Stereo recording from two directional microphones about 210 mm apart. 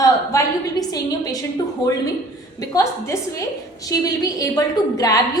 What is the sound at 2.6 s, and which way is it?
A woman's voice, 15° left (ahead or behind).